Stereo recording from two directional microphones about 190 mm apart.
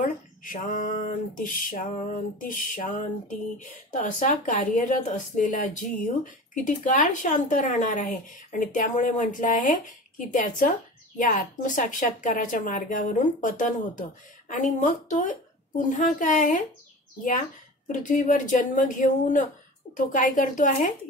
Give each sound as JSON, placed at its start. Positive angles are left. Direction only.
{"t": 0.0, "sound": "speech", "side_deg": 45}
{"t": 17.8, "sound": "speech", "side_deg": 40}